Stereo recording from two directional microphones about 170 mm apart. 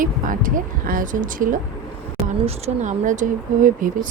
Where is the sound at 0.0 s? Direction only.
50° right (ahead or behind).